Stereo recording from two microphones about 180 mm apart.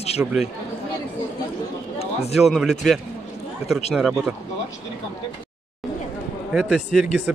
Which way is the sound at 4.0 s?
5° right (ahead or behind).